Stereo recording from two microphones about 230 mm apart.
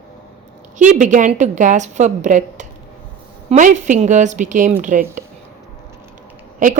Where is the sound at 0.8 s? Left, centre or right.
Right.